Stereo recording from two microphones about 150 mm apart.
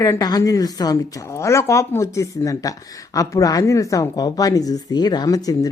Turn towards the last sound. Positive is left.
turn(degrees=25)  # may be behind; listen again after turning